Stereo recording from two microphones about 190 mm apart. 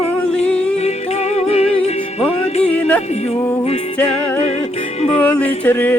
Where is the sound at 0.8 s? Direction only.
35° left (ahead or behind).